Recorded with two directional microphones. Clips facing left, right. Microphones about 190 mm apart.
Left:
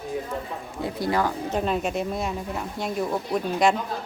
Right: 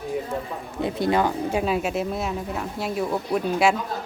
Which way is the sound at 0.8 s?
20° right (ahead or behind).